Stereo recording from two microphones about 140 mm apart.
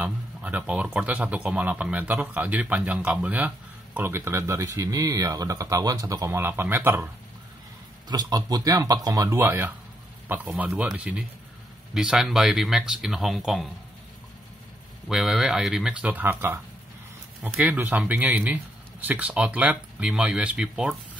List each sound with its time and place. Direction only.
0.0 s a man's voice: 10° right (ahead or behind)
8.1 s a man's voice: 30° right (ahead or behind); by 13.7 s centre (ahead or behind)
15.0 s a man's voice: 5° right (ahead or behind)